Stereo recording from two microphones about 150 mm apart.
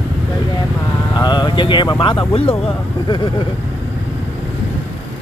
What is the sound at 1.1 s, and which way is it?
Speech, 30° left (ahead or behind).